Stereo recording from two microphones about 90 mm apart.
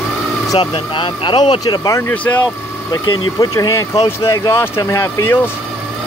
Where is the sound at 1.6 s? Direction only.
45° left (ahead or behind).